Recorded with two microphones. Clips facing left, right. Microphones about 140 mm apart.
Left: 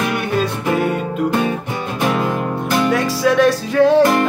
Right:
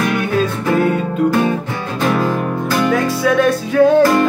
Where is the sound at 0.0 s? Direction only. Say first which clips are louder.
Right 2 dB; centre (ahead or behind).